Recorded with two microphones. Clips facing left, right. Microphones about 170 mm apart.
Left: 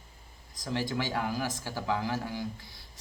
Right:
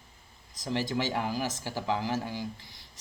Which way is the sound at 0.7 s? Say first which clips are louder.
Right 1 dB; 20° right (ahead or behind).